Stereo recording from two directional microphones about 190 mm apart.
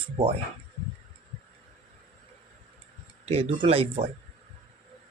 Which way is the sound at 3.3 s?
30° right (ahead or behind).